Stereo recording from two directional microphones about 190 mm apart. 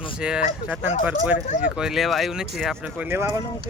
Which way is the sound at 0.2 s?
5° right (ahead or behind).